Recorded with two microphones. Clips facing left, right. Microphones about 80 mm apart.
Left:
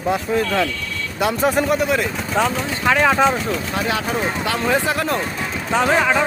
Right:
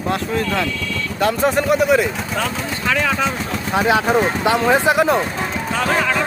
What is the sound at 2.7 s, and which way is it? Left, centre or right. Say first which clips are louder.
Speech: left 4 dB; left.